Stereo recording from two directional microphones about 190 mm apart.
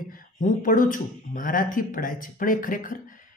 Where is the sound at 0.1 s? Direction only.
45° left (ahead or behind).